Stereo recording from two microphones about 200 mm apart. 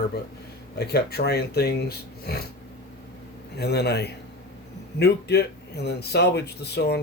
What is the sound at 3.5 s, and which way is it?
A man's voice, 55° left (ahead or behind).